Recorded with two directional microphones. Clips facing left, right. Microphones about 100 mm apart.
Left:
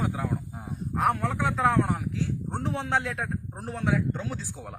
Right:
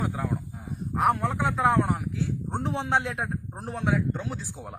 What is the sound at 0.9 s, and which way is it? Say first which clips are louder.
Speech: right 2 dB; 15° right (ahead or behind).